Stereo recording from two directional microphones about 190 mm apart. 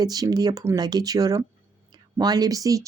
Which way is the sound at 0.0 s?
20° right (ahead or behind).